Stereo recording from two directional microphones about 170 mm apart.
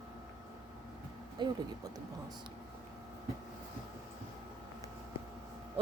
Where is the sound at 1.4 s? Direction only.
25° right (ahead or behind).